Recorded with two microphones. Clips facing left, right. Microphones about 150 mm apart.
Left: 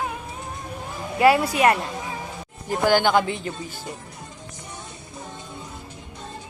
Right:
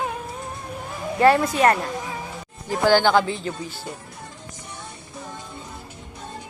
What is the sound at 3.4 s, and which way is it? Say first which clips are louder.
Speech: right 2 dB; 45° left (ahead or behind).